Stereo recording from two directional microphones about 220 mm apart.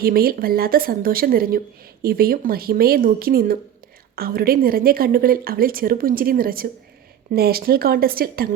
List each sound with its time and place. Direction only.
0.0 s a woman's voice: 40° right (ahead or behind)